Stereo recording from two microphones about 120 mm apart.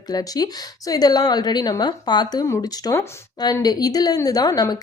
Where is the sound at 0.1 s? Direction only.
30° left (ahead or behind).